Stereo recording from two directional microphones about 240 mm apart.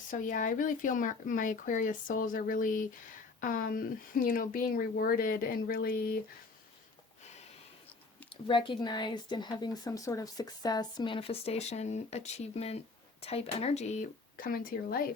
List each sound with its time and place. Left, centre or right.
0.1 s speech: left
8.3 s speech: left